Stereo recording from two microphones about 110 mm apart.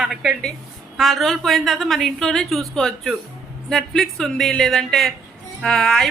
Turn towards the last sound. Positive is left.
turn(degrees=5)  # may be behind; listen again after turning